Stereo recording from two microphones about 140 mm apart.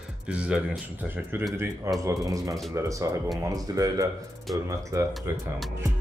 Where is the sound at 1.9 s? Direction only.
20° right (ahead or behind).